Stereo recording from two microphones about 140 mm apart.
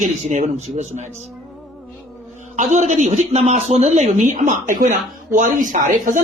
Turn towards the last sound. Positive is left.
turn(degrees=-75)  # may be behind; listen again after turning